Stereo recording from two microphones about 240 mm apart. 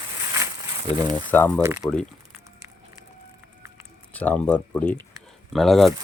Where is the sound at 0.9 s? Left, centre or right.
Centre.